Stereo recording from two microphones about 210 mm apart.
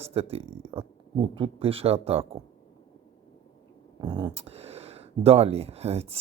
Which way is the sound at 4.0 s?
20° right (ahead or behind).